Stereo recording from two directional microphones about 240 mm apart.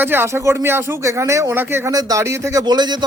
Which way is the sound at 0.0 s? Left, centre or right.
Centre.